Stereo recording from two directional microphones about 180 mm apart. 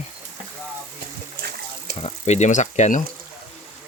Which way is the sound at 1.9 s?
35° left (ahead or behind).